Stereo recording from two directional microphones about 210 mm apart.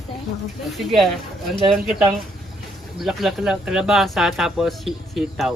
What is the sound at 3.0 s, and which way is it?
Speech, centre (ahead or behind).